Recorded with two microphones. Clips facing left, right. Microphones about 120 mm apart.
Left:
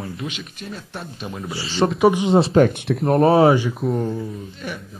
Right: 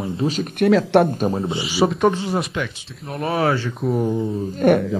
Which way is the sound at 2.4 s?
30° left (ahead or behind).